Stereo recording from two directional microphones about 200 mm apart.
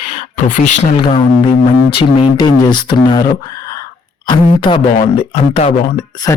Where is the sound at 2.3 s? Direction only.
20° left (ahead or behind).